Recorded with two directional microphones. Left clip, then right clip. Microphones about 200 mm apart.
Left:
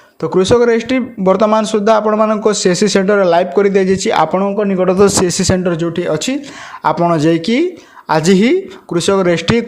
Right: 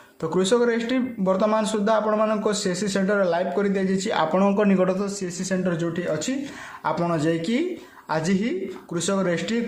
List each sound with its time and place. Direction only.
0.2 s speech: 25° left (ahead or behind)
4.4 s a man's voice: 15° left (ahead or behind)
4.9 s speech: 40° left (ahead or behind)
6.8 s speech: 30° left (ahead or behind)